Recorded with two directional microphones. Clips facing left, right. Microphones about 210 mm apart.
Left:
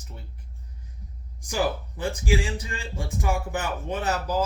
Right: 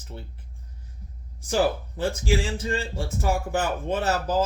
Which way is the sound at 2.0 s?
15° left (ahead or behind).